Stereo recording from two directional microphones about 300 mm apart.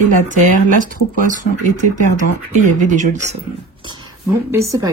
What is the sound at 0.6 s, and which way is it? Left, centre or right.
Speech, right.